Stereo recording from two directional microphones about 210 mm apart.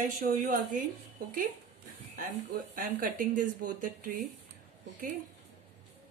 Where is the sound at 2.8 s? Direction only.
40° right (ahead or behind).